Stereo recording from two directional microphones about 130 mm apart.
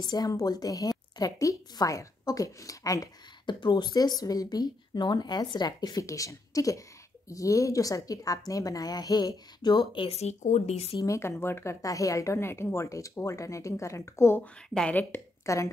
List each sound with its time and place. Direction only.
0.0 s a woman's voice: 30° left (ahead or behind); by 11.0 s 55° left (ahead or behind)
11.0 s a woman's voice: 20° left (ahead or behind)
14.4 s speech: 10° left (ahead or behind); by 15.7 s 25° left (ahead or behind)